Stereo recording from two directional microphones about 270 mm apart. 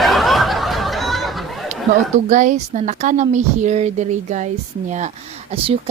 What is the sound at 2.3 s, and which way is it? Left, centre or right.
A woman's voice, right.